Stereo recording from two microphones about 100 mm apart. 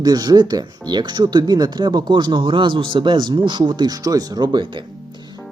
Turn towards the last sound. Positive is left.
turn(degrees=-55)  # may be behind; listen again after turning